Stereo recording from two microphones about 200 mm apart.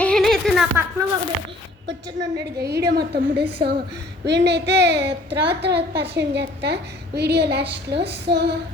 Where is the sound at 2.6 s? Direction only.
55° right (ahead or behind).